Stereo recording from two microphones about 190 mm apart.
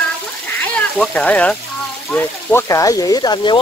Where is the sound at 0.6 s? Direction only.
5° left (ahead or behind).